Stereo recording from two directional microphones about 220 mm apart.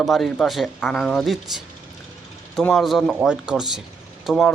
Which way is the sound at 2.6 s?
Centre (ahead or behind).